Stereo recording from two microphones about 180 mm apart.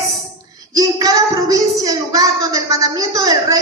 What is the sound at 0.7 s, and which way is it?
Speech, 20° right (ahead or behind).